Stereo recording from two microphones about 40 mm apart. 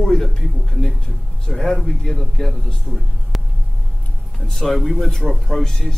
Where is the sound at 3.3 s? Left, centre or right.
Centre.